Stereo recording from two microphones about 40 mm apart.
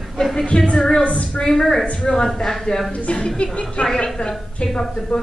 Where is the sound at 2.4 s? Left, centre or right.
Centre.